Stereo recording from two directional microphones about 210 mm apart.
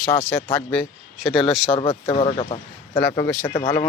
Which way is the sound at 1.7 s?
25° left (ahead or behind).